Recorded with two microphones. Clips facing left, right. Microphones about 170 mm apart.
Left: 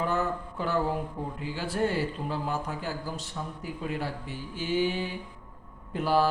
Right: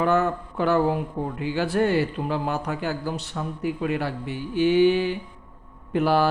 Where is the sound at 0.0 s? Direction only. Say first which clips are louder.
Right 7 dB; 70° right (ahead or behind).